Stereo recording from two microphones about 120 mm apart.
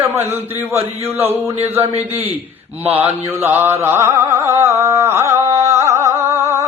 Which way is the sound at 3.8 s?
20° right (ahead or behind).